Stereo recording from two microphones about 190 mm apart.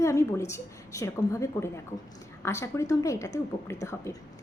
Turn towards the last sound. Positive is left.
turn(degrees=15)  # may be behind; listen again after turning